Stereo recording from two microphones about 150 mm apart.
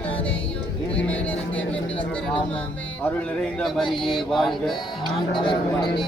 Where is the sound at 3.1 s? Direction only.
5° left (ahead or behind).